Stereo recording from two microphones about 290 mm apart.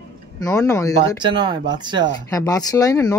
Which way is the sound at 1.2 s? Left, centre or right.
Centre.